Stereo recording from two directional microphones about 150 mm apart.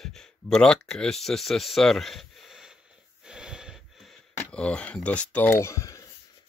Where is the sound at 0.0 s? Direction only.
5° left (ahead or behind).